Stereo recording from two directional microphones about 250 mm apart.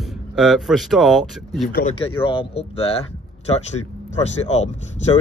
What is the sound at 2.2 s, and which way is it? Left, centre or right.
Speech, left.